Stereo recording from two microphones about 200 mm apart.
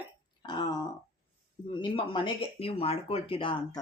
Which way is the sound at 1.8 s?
25° left (ahead or behind).